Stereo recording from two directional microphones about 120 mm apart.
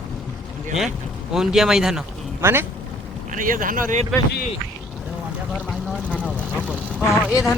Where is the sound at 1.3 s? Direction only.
5° right (ahead or behind).